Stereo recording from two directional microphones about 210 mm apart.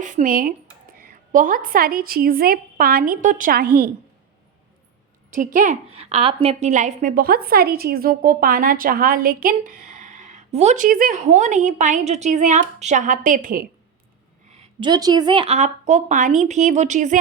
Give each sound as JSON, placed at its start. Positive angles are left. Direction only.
{"t": 0.0, "sound": "a woman's voice", "side_deg": -35}
{"t": 5.3, "sound": "a woman's voice", "side_deg": -40}
{"t": 14.5, "sound": "a woman's voice", "side_deg": -20}